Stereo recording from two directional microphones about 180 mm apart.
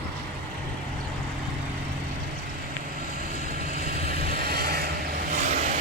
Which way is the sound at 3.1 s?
50° right (ahead or behind).